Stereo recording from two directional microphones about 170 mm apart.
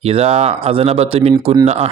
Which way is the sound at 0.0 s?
35° right (ahead or behind).